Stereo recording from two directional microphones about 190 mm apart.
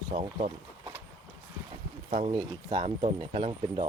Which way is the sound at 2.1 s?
30° right (ahead or behind).